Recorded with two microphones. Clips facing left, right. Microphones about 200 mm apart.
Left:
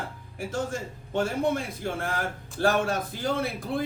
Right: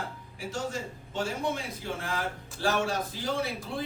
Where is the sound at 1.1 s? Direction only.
55° left (ahead or behind).